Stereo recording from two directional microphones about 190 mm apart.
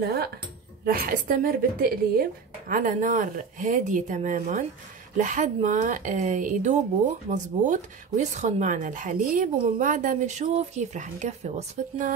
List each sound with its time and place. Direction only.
0.8 s a woman's voice: 50° right (ahead or behind); by 12.1 s 35° right (ahead or behind)